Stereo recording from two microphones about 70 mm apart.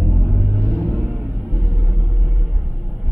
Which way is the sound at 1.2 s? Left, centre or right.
Centre.